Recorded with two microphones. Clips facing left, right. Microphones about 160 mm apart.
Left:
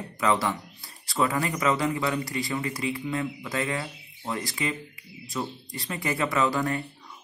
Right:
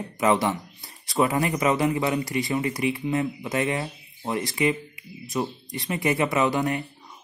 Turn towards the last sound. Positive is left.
turn(degrees=-20)  # may be behind; listen again after turning